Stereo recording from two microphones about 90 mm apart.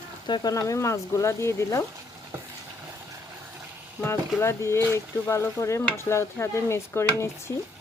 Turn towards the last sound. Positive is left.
turn(degrees=30)  # may be behind; listen again after turning